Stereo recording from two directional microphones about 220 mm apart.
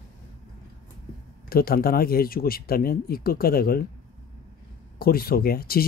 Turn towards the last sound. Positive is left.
turn(degrees=45)  # may be behind; listen again after turning